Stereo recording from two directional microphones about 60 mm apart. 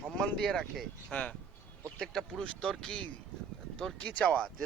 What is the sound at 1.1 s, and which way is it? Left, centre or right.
Speech, left.